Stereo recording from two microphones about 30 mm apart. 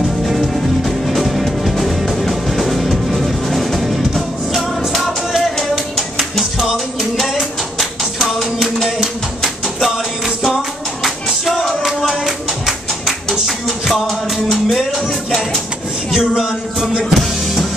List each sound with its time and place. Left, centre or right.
0.2 s music: centre
8.0 s music: centre
9.8 s music: centre
11.6 s music: centre
13.7 s music: centre
16.1 s a sound: centre
17.0 s music: centre